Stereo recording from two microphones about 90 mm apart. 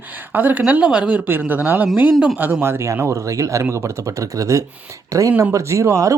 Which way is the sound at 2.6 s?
30° right (ahead or behind).